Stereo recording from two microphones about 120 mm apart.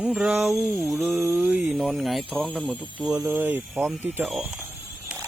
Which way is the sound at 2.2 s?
10° left (ahead or behind).